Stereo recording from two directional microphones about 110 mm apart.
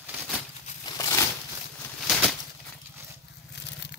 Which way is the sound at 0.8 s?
35° left (ahead or behind).